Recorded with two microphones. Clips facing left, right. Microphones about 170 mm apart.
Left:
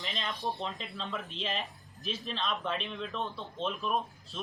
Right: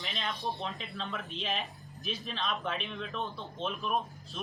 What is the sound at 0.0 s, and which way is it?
A man's voice, centre (ahead or behind).